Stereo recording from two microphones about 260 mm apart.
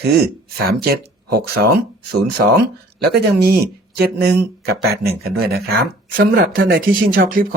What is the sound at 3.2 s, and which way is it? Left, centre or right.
Speech, right.